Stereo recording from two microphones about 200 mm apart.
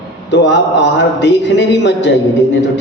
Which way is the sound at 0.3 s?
60° left (ahead or behind).